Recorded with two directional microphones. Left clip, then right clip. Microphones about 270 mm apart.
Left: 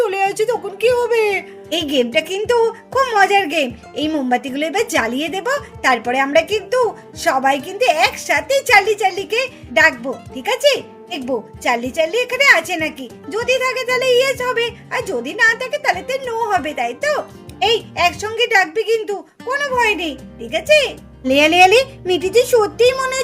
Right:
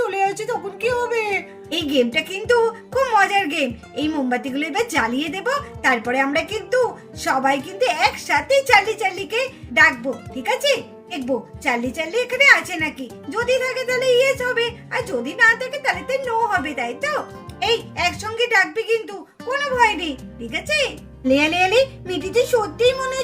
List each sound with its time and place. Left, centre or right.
0.0 s a child's voice: left